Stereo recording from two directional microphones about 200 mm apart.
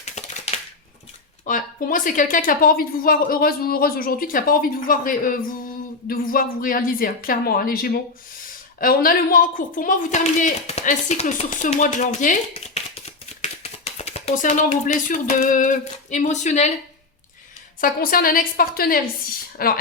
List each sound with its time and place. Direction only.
0.0 s typewriter: 35° left (ahead or behind)
1.5 s speech: 40° left (ahead or behind)
17.7 s speech: 45° left (ahead or behind)